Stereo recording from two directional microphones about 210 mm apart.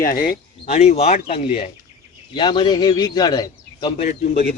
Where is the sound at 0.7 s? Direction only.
35° left (ahead or behind).